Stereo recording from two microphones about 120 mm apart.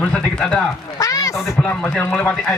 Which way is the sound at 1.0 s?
30° left (ahead or behind).